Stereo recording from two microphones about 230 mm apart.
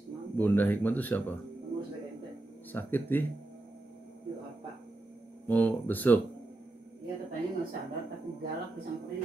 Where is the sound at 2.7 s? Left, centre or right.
Centre.